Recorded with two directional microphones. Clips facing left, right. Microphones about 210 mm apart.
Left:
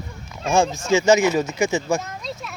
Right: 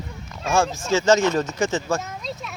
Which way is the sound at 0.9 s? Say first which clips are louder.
Left 2 dB; 10° left (ahead or behind).